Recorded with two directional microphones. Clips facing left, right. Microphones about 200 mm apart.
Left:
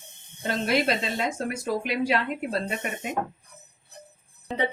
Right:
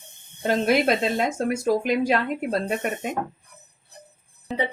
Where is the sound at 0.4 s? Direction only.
45° right (ahead or behind).